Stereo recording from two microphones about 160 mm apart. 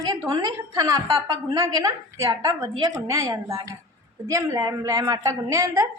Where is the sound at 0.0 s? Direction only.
25° right (ahead or behind).